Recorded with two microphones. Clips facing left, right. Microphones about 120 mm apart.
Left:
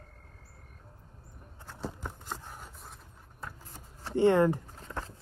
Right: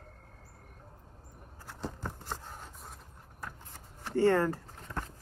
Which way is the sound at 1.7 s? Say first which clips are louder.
Left 1 dB; centre (ahead or behind).